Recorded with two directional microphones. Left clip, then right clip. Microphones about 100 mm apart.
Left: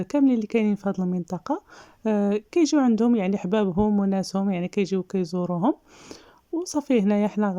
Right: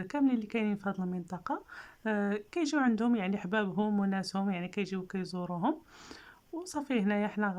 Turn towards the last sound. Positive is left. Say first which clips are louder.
# left 8 dB
turn(degrees=35)  # may be behind; listen again after turning